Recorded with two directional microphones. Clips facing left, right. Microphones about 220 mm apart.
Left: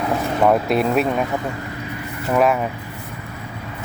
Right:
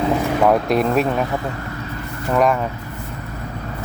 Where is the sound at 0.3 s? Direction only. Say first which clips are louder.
Left 1 dB; centre (ahead or behind).